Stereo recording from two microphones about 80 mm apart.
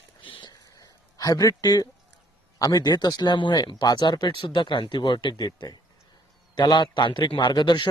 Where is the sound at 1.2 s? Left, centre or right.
Left.